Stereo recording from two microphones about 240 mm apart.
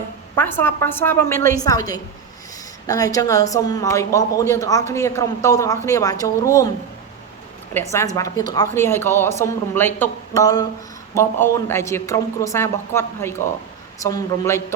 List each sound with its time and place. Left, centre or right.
0.3 s a man's voice: centre
7.7 s a man's voice: centre